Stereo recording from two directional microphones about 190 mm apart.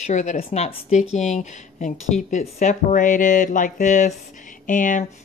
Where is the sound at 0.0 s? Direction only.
40° left (ahead or behind).